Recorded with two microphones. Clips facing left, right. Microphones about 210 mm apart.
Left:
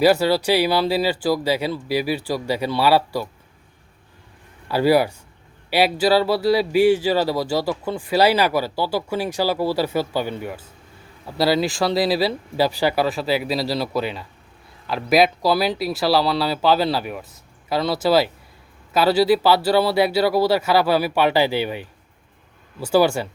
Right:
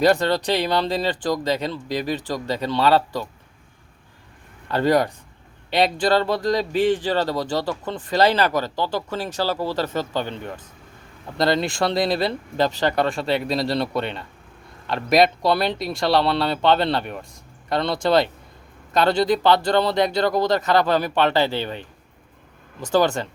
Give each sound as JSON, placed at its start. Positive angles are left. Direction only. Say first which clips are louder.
{"t": 0.0, "sound": "speech", "louder": "left 2 dB", "side_deg": 5}
{"t": 4.7, "sound": "speech", "louder": "left 2 dB", "side_deg": 10}